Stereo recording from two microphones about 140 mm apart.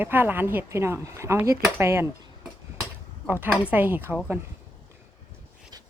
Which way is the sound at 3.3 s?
15° right (ahead or behind).